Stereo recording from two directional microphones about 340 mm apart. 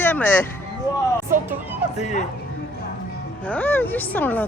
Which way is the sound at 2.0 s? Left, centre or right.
Left.